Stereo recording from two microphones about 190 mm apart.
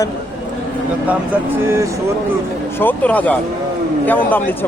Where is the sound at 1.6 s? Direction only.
15° right (ahead or behind).